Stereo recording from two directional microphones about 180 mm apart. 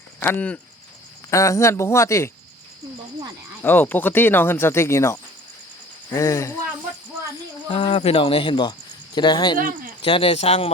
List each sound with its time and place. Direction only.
0.2 s speech: 10° left (ahead or behind)
3.6 s speech: 10° left (ahead or behind)
7.7 s speech: 30° left (ahead or behind)